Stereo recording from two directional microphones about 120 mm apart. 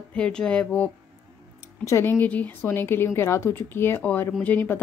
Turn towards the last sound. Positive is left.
turn(degrees=15)  # may be behind; listen again after turning